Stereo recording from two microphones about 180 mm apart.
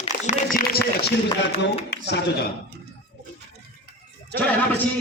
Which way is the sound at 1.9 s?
65° left (ahead or behind).